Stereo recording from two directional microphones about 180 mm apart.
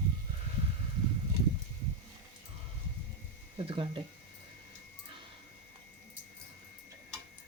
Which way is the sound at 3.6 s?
30° right (ahead or behind).